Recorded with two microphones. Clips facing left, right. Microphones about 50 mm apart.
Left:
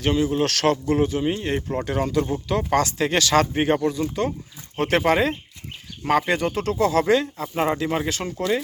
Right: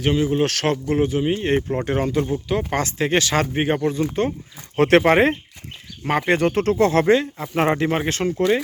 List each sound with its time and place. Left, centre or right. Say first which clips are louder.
0.0 s speech: right 2 dB; centre
2.5 s speech: left 1 dB; centre
3.8 s speech: right 2 dB; right
4.8 s speech: right 5 dB; right
7.1 s speech: right 3 dB; centre
7.5 s speech: right 4 dB; right
7.9 s speech: right 4 dB; right